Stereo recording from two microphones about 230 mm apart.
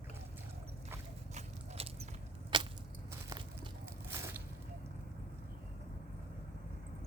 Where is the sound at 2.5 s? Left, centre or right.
Centre.